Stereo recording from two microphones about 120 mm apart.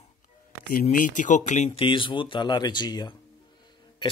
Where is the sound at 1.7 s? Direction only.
45° left (ahead or behind).